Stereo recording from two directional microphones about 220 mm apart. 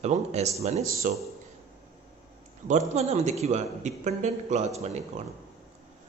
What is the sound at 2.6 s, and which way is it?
A man's voice, 30° right (ahead or behind).